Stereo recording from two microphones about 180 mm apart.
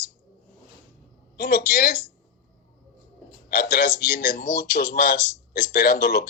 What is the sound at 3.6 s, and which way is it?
Speech, 60° left (ahead or behind).